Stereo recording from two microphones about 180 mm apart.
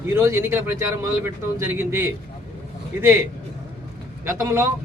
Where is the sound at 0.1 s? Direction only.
15° right (ahead or behind).